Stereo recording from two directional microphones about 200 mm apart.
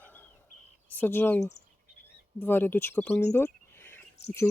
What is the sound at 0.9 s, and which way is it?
Speech, 10° left (ahead or behind).